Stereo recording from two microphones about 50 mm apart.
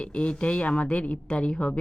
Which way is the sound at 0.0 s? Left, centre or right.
Left.